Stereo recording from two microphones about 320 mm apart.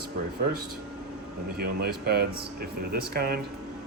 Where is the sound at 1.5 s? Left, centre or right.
Right.